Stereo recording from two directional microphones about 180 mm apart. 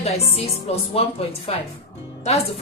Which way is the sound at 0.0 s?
35° left (ahead or behind).